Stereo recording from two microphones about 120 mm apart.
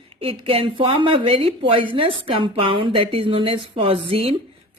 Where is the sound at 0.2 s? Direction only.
50° right (ahead or behind).